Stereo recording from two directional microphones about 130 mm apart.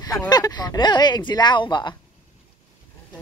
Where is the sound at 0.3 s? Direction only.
30° left (ahead or behind).